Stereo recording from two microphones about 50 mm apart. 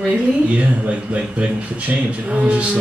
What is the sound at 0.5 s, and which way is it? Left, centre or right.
Speech, right.